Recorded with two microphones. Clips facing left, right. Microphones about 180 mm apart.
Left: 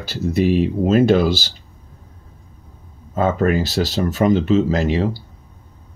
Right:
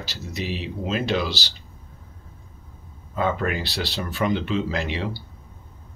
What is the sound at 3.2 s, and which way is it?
Speech, 40° left (ahead or behind).